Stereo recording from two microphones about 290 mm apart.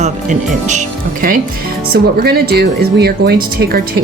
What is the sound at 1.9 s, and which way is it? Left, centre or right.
Speech, right.